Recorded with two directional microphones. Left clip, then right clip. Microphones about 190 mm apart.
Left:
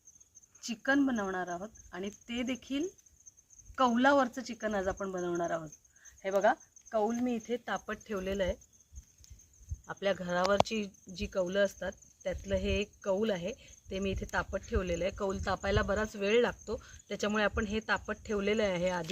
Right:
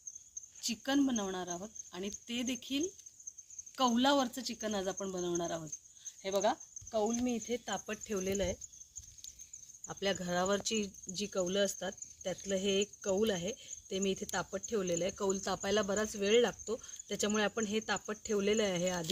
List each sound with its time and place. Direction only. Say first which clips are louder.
0.6 s speech: left 3 dB; 5° left (ahead or behind)
6.2 s cricket: left 4 dB; 5° left (ahead or behind)
7.3 s speech: left 2 dB; 5° right (ahead or behind)
7.9 s speech: left 1 dB; 20° right (ahead or behind)
9.8 s speech: left 3 dB; 25° right (ahead or behind)